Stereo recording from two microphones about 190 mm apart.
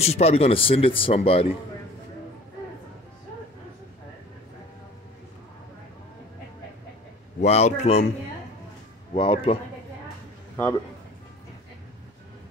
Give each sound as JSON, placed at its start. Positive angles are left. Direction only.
{"t": 0.0, "sound": "speech", "side_deg": 35}
{"t": 7.4, "sound": "a man's voice", "side_deg": 35}
{"t": 9.1, "sound": "speech", "side_deg": 25}